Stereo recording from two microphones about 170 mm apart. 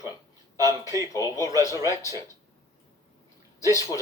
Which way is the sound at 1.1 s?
20° left (ahead or behind).